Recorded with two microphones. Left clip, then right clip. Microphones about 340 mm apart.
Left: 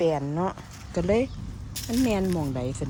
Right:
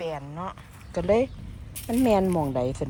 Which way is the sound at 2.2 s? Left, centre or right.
Centre.